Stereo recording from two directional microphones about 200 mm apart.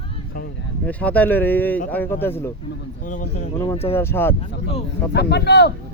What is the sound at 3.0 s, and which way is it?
Speech, 40° left (ahead or behind).